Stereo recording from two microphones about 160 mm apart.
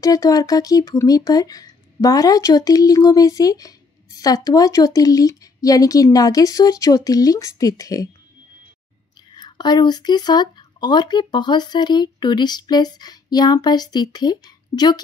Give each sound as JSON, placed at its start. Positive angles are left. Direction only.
{"t": 0.0, "sound": "speech", "side_deg": 20}
{"t": 9.3, "sound": "speech", "side_deg": 25}